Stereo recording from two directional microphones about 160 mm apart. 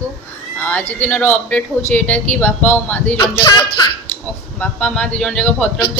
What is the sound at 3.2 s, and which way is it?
Speech, 25° left (ahead or behind).